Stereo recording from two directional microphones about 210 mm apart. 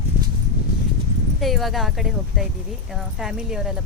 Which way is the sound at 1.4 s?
Centre (ahead or behind).